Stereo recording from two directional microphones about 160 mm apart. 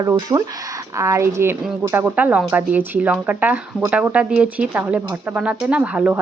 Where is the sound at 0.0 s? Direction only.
20° right (ahead or behind).